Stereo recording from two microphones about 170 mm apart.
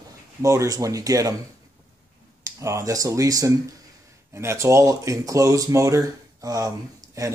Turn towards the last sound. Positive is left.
turn(degrees=-20)  # may be behind; listen again after turning